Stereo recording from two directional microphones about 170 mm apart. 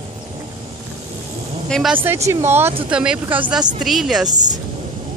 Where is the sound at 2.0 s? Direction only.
15° right (ahead or behind).